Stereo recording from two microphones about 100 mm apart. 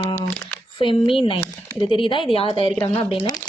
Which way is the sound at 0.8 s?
60° left (ahead or behind).